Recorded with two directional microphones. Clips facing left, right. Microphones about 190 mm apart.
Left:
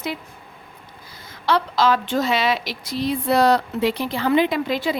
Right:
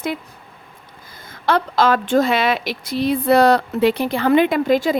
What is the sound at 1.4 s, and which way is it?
A woman's voice, 50° right (ahead or behind).